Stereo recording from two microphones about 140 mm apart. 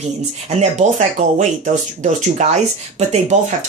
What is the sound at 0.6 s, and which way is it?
Speech, 55° right (ahead or behind).